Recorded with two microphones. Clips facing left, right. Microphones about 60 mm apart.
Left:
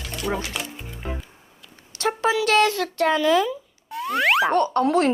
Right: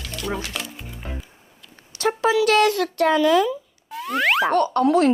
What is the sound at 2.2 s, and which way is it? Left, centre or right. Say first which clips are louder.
Speech: right 2 dB; left.